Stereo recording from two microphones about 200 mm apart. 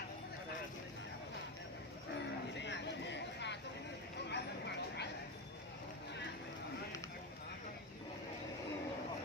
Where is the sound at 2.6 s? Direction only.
60° left (ahead or behind).